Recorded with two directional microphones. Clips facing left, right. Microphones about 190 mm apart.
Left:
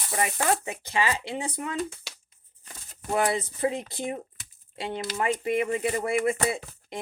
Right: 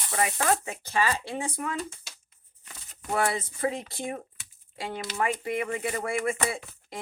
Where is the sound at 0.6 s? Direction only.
15° left (ahead or behind).